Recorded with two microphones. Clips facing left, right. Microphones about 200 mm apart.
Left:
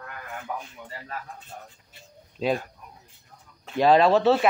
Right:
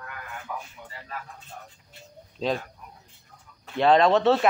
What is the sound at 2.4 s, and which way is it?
Speech, 5° left (ahead or behind).